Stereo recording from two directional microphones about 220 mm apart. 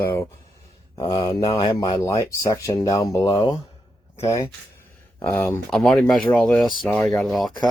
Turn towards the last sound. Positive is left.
turn(degrees=0)  # may be behind; listen again after turning